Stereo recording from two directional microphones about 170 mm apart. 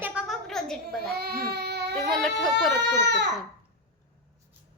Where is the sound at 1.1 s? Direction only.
65° right (ahead or behind).